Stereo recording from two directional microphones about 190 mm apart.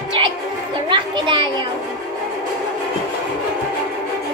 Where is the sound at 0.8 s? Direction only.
25° right (ahead or behind).